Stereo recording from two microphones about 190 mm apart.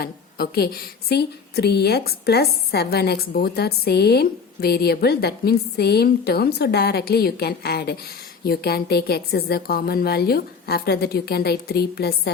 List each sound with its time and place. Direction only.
0.0 s a woman's voice: 55° left (ahead or behind)